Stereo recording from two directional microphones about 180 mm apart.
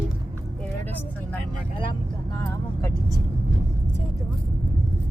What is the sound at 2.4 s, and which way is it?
Speech, 15° left (ahead or behind).